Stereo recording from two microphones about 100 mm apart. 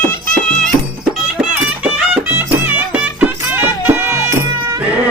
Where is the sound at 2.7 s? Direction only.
15° right (ahead or behind).